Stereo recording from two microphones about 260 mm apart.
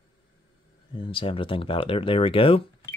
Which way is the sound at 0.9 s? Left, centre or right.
Centre.